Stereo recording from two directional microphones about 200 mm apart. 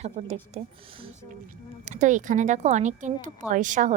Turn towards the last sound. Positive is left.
turn(degrees=-40)  # may be behind; listen again after turning